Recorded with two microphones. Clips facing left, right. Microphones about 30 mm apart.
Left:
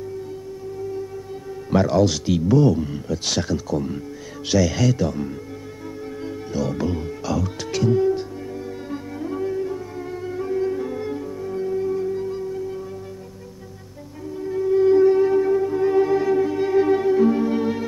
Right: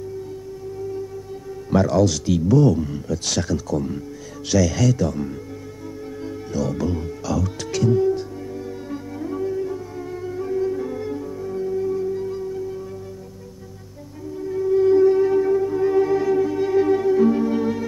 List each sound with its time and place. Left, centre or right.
1.7 s speech: centre
8.9 s music: centre
14.4 s music: centre